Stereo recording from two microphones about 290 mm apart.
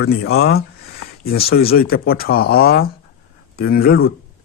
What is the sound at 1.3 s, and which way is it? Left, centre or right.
Speech, left.